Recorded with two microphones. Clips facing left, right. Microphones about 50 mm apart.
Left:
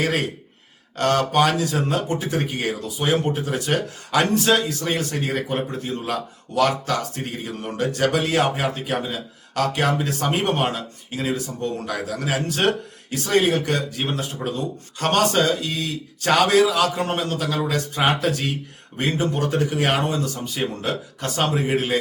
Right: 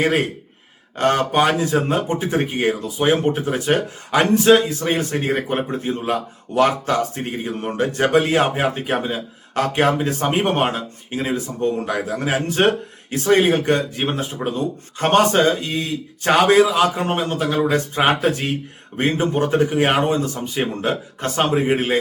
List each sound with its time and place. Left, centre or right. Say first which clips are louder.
0.0 s speech: right 4 dB; right